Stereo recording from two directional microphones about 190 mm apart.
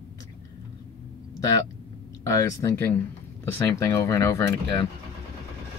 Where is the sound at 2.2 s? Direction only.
15° left (ahead or behind).